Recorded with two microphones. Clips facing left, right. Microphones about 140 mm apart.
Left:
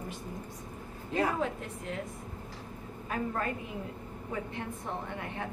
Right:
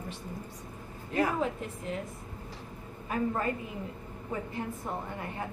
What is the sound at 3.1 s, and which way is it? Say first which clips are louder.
Speech: right 3 dB; 5° right (ahead or behind).